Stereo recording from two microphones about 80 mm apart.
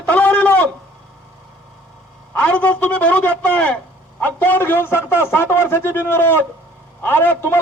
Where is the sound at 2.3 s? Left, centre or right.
Centre.